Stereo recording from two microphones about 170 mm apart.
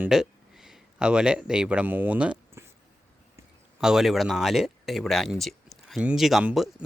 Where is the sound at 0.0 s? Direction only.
5° right (ahead or behind).